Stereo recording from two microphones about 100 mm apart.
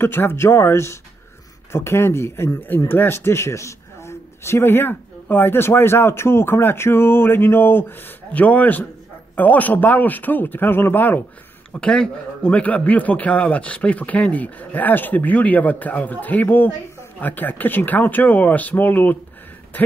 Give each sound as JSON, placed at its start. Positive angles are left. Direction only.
{"t": 0.0, "sound": "a man's voice", "side_deg": 25}